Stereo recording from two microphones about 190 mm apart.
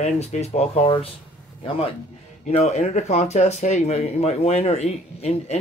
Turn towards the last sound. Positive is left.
turn(degrees=35)  # may be behind; listen again after turning